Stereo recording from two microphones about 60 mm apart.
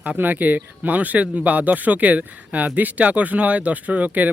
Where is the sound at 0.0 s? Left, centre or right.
Right.